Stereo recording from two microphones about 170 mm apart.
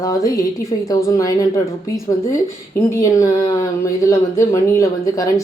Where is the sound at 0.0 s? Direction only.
20° left (ahead or behind).